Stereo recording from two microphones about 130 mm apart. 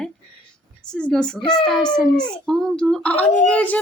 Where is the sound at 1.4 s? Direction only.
35° left (ahead or behind).